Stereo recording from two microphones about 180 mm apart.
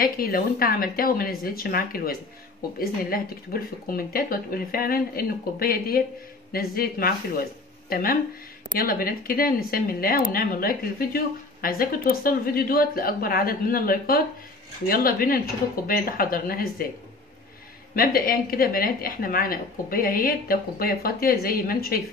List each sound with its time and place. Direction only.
0.0 s a woman's voice: 55° left (ahead or behind)
17.9 s a woman's voice: 55° left (ahead or behind)